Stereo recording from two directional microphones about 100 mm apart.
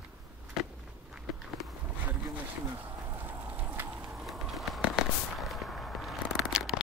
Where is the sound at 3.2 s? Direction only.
20° right (ahead or behind).